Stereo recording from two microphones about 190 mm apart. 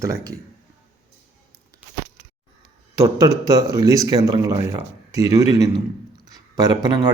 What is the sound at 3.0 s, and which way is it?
A man's voice, 20° right (ahead or behind).